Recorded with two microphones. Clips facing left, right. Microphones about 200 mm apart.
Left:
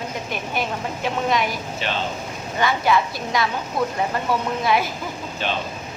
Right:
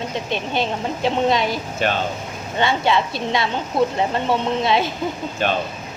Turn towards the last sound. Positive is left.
turn(degrees=-50)  # may be behind; listen again after turning